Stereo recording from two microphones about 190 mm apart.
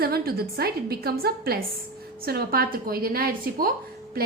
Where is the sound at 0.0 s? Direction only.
55° right (ahead or behind).